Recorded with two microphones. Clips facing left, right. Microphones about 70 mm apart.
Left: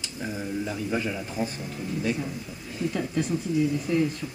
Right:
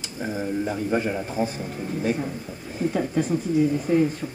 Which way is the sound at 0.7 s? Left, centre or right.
Right.